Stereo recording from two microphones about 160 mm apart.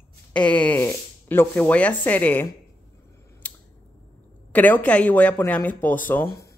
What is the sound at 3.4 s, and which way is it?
Scissors, 10° left (ahead or behind).